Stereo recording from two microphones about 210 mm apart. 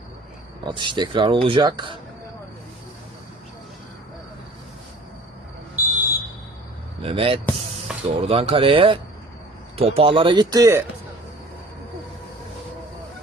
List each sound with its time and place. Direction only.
0.7 s speech: 20° right (ahead or behind)
5.7 s smoke detector: 10° right (ahead or behind)
7.0 s speech: 25° right (ahead or behind)